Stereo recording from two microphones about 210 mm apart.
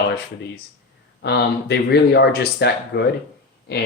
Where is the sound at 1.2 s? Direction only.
50° left (ahead or behind).